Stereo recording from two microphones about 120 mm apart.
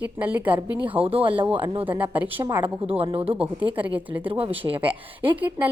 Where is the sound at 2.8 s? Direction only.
50° right (ahead or behind).